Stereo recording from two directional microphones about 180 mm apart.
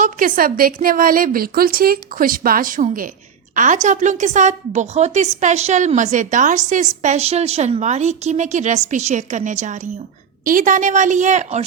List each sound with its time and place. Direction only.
0.0 s a woman's voice: 50° right (ahead or behind)